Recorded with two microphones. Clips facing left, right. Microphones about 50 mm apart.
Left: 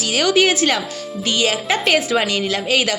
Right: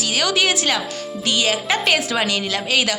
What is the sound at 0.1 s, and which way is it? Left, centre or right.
A woman's voice, left.